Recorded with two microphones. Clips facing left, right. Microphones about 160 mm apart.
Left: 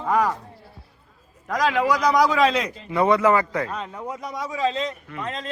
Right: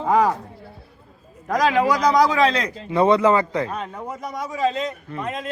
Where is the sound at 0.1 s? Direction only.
20° right (ahead or behind).